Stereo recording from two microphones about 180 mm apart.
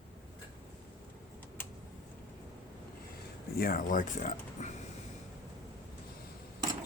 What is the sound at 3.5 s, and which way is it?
Speech, 55° left (ahead or behind).